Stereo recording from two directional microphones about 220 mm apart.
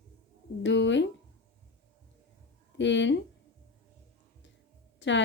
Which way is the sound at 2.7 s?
55° left (ahead or behind).